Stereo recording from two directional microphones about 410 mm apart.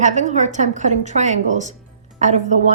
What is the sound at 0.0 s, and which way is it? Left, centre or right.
A woman's voice, centre.